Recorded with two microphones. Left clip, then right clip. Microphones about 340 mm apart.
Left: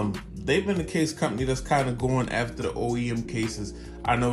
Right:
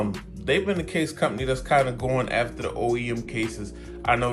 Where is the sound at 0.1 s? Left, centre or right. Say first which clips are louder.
Right 1 dB; centre.